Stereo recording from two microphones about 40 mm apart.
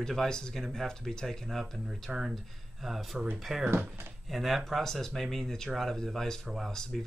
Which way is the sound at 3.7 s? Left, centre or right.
Right.